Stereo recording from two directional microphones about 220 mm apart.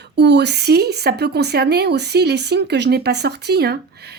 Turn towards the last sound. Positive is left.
turn(degrees=-45)  # may be behind; listen again after turning